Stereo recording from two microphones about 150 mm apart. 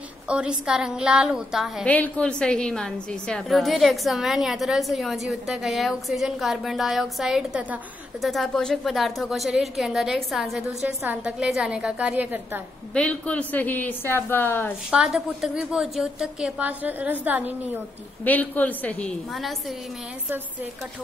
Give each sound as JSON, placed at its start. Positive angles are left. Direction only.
{"t": 0.3, "sound": "a woman's voice", "side_deg": -5}
{"t": 1.9, "sound": "a woman's voice", "side_deg": 10}
{"t": 12.9, "sound": "speech", "side_deg": 10}
{"t": 14.9, "sound": "a woman's voice", "side_deg": -5}
{"t": 18.2, "sound": "speech", "side_deg": 10}